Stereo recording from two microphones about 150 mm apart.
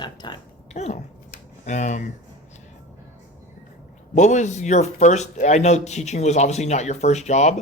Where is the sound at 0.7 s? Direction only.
50° left (ahead or behind).